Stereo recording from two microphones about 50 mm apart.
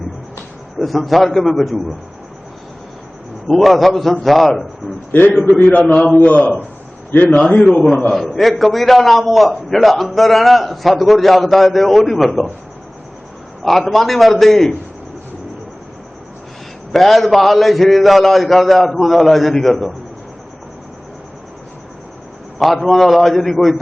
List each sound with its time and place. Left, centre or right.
0.8 s a man's voice: centre
3.4 s a man's voice: centre
5.5 s a man's voice: left
8.1 s a man's voice: centre
13.7 s a man's voice: centre
16.9 s a man's voice: centre
22.5 s a man's voice: centre